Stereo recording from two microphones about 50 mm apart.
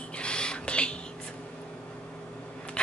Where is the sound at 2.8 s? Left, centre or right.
Centre.